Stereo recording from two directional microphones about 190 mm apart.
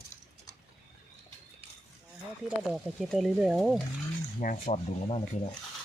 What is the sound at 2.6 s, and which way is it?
Speech, centre (ahead or behind).